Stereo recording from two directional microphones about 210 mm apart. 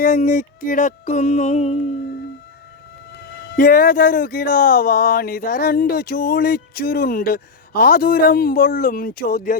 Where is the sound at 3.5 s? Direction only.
45° left (ahead or behind).